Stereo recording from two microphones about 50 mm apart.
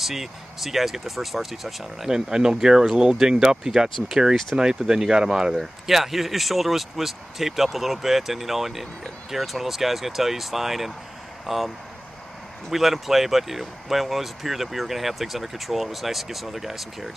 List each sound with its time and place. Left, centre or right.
0.0 s speech: centre
12.7 s speech: centre